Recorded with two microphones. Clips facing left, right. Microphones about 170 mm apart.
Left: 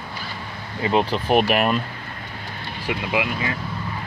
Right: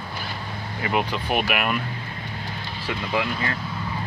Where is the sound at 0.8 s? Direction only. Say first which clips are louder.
Left 5 dB; 30° left (ahead or behind).